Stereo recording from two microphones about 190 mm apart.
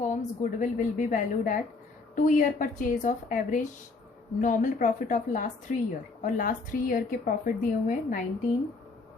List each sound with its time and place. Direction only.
0.1 s a woman's voice: 40° left (ahead or behind)